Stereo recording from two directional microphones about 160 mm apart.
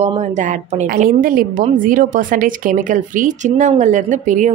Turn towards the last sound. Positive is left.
turn(degrees=-50)  # may be behind; listen again after turning